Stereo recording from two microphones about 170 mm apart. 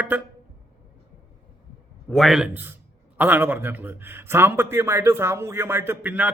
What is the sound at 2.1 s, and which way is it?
A man's voice, centre (ahead or behind).